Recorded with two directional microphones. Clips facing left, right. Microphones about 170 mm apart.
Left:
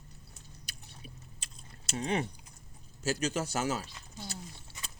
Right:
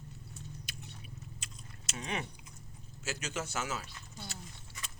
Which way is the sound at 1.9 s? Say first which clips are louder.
Left 7 dB; 35° left (ahead or behind).